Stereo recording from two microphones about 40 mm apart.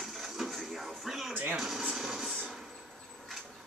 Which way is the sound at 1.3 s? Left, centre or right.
Right.